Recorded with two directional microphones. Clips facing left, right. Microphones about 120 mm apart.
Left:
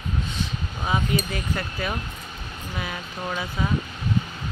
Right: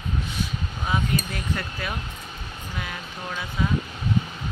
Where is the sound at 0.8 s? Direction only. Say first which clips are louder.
Left 1 dB; 5° left (ahead or behind).